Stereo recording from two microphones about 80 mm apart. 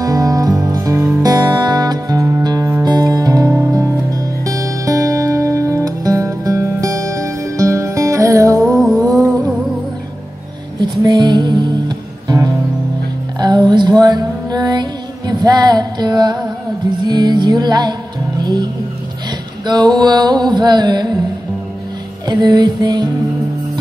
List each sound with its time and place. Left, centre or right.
0.0 s music: right
1.2 s music: right
3.5 s music: right
8.9 s a sound: centre
10.8 s music: right
13.4 s music: right
22.2 s music: right